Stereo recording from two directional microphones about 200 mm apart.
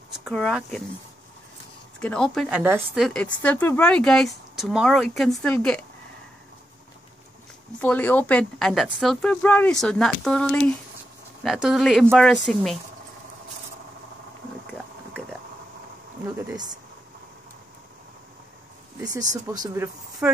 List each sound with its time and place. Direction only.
0.1 s speech: centre (ahead or behind)
2.0 s speech: 5° left (ahead or behind)
7.8 s speech: 10° left (ahead or behind)
16.4 s speech: 20° right (ahead or behind)
19.0 s speech: 15° right (ahead or behind)